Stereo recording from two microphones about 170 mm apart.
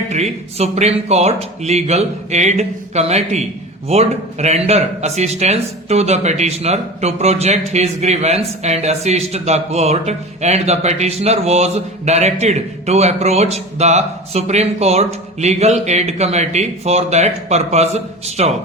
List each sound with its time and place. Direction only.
0.1 s speech: 40° right (ahead or behind)